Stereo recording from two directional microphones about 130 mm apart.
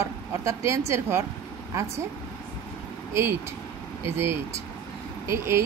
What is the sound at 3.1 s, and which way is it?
Speech, 20° right (ahead or behind).